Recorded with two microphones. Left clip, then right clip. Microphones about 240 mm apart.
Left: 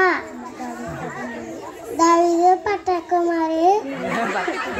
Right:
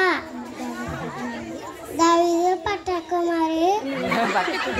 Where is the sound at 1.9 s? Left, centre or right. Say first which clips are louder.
Left 3 dB; right.